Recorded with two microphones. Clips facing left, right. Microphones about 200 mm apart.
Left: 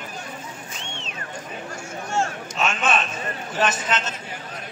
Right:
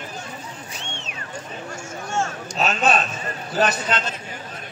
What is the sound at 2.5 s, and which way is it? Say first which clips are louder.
A man's voice: right 3 dB; 35° right (ahead or behind).